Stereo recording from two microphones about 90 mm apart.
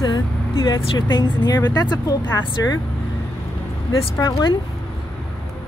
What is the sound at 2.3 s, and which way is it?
Speech, 40° left (ahead or behind).